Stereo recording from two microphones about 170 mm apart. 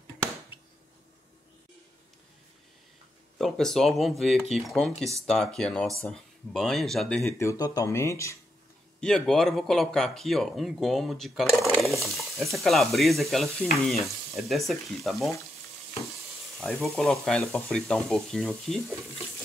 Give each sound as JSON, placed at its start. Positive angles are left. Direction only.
{"t": 3.3, "sound": "speech", "side_deg": 0}
{"t": 7.3, "sound": "speech", "side_deg": 20}
{"t": 9.0, "sound": "speech", "side_deg": 5}
{"t": 16.5, "sound": "speech", "side_deg": 0}